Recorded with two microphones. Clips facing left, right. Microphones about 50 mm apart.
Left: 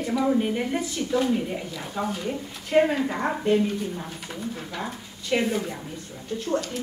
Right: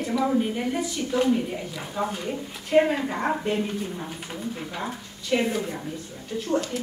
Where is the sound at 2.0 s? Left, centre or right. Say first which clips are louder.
Left 2 dB; right.